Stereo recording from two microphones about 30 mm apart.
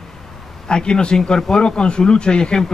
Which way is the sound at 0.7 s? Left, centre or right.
Left.